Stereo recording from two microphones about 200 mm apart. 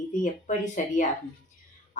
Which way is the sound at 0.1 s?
40° left (ahead or behind).